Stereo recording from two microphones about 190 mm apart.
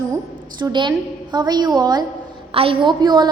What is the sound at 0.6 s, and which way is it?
A woman's voice, 25° right (ahead or behind).